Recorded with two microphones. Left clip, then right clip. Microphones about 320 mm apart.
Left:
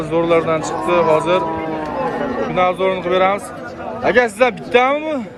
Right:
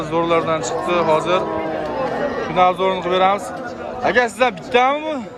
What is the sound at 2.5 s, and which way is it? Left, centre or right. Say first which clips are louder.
Speech: right 1 dB; centre.